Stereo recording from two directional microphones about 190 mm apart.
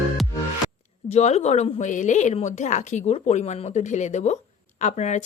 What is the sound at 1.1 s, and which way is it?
Speech, 35° left (ahead or behind).